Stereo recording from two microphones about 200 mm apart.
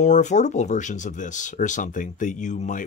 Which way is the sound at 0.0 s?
35° left (ahead or behind).